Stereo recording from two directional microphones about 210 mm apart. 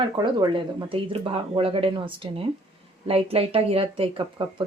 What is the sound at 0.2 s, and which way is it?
Speech, 20° right (ahead or behind).